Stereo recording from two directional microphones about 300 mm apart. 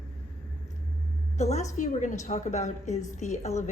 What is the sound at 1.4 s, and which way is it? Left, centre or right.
Speech, left.